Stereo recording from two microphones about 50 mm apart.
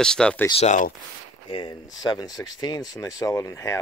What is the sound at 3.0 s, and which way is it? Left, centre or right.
Speech, left.